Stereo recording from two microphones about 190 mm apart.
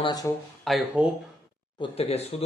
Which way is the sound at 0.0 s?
20° left (ahead or behind).